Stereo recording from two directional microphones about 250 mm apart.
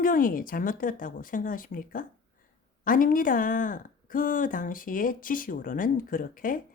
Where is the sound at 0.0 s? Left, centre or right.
Left.